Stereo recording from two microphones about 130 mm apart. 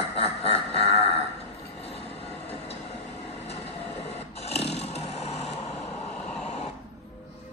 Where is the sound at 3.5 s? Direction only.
50° left (ahead or behind).